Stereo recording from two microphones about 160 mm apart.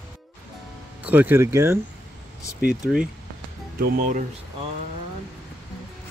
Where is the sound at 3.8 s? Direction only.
60° right (ahead or behind).